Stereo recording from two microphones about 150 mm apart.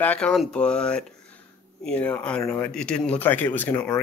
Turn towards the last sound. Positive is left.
turn(degrees=10)  # may be behind; listen again after turning